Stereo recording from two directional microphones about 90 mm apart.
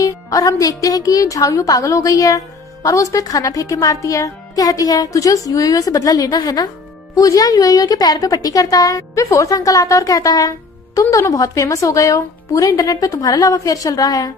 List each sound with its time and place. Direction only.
0.0 s speech: 40° left (ahead or behind)